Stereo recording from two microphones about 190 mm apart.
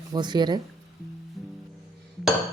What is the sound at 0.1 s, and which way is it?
Speech, 25° right (ahead or behind).